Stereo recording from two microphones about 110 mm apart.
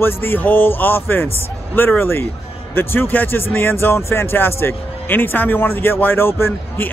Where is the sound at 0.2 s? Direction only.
15° left (ahead or behind).